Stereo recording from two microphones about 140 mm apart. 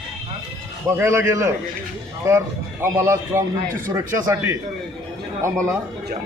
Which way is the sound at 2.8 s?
20° right (ahead or behind).